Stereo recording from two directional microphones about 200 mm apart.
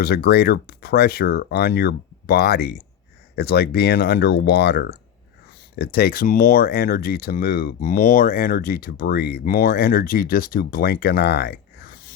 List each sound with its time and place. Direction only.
0.0 s speech: 50° left (ahead or behind)